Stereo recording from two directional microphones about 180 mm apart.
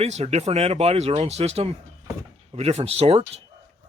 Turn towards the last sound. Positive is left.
turn(degrees=-35)  # may be behind; listen again after turning